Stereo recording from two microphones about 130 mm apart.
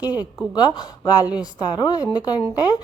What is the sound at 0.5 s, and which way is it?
A woman's voice, 30° left (ahead or behind).